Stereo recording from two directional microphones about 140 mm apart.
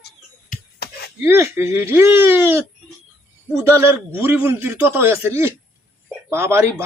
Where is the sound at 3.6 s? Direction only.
20° right (ahead or behind).